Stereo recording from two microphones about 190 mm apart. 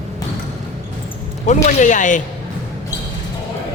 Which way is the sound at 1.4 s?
40° left (ahead or behind).